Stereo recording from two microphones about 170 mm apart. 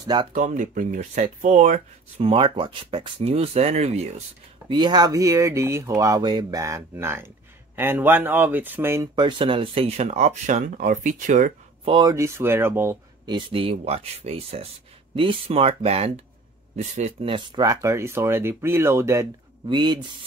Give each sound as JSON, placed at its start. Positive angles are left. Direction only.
{"t": 0.0, "sound": "speech", "side_deg": -25}
{"t": 0.3, "sound": "speech", "side_deg": -50}
{"t": 4.6, "sound": "speech", "side_deg": -25}
{"t": 11.8, "sound": "speech", "side_deg": -25}
{"t": 13.2, "sound": "speech", "side_deg": -25}
{"t": 19.7, "sound": "speech", "side_deg": -25}